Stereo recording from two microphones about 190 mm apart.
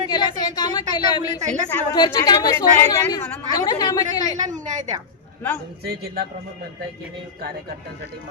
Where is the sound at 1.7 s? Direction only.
20° left (ahead or behind).